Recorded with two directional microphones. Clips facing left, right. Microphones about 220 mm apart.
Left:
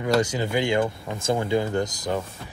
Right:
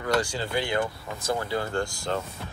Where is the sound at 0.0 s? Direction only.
20° left (ahead or behind).